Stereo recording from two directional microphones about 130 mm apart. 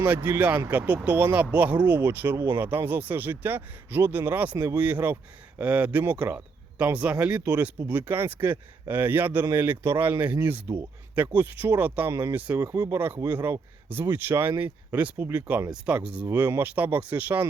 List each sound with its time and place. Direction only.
0.0 s speech: 15° right (ahead or behind)
13.0 s speech: 15° right (ahead or behind)